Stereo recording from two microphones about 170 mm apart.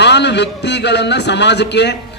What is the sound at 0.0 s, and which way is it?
A man's voice, 90° left.